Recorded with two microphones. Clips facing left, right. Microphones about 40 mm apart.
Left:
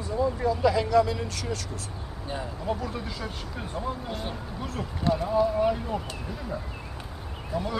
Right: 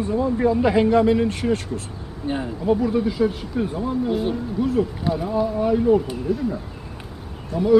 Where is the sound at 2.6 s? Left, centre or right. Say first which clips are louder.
Right 13 dB; centre.